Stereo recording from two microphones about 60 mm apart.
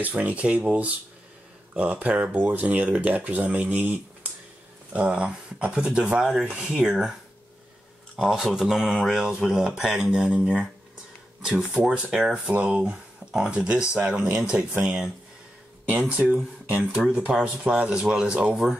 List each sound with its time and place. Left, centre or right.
0.0 s speech: right
8.2 s speech: centre
11.7 s speech: centre